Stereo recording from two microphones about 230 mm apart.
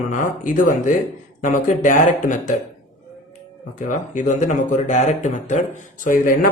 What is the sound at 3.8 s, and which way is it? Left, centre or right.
Speech, left.